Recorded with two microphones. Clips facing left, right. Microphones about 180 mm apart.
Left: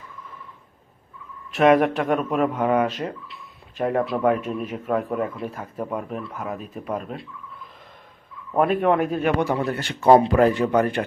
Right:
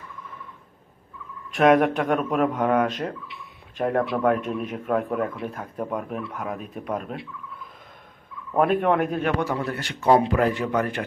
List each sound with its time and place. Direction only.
1.5 s speech: 5° left (ahead or behind)
3.3 s a sound: 5° left (ahead or behind)
4.1 s speech: 10° left (ahead or behind)
8.5 s speech: 5° left (ahead or behind)
9.6 s a man's voice: 25° left (ahead or behind)
10.1 s speech: 35° left (ahead or behind)